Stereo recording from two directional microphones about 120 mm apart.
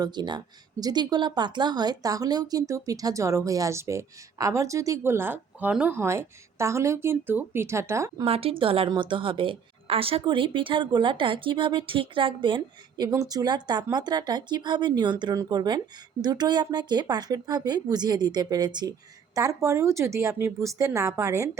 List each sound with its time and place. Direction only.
0.0 s speech: 35° right (ahead or behind)
8.2 s a woman's voice: 50° right (ahead or behind)
13.1 s speech: 30° right (ahead or behind)